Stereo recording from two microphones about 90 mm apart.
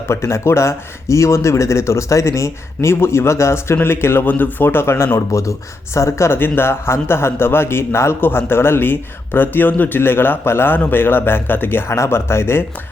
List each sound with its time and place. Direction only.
0.1 s speech: 30° left (ahead or behind)